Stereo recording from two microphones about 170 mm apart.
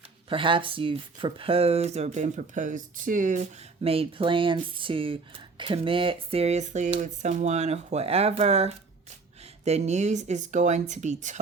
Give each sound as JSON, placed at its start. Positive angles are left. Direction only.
{"t": 0.3, "sound": "speech", "side_deg": -30}
{"t": 3.8, "sound": "speech", "side_deg": -35}